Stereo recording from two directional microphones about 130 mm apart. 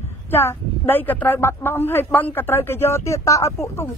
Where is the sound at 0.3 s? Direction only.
20° left (ahead or behind).